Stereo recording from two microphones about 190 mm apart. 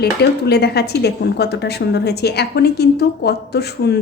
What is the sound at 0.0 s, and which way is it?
A woman's voice, 60° left (ahead or behind).